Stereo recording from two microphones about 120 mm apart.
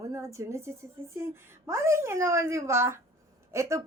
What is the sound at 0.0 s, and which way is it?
Speech, 25° right (ahead or behind).